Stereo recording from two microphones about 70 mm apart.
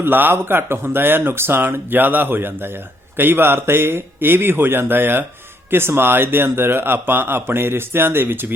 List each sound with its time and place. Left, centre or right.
0.0 s speech: right